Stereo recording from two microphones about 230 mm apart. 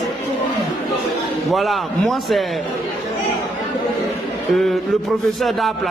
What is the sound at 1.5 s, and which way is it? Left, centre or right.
Speech, centre.